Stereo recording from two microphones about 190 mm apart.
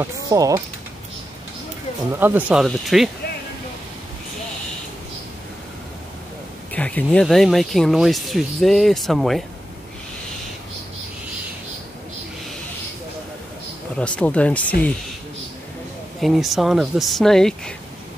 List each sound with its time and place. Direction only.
0.0 s speech: 20° right (ahead or behind)
2.1 s speech: 10° right (ahead or behind)
6.7 s speech: 5° left (ahead or behind)
13.9 s speech: 5° left (ahead or behind)
16.2 s speech: centre (ahead or behind)